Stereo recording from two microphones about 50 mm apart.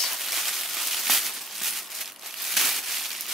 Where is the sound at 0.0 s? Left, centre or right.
Centre.